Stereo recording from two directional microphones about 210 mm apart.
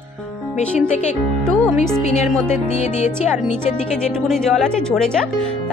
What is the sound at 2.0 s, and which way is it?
Speech, 35° left (ahead or behind).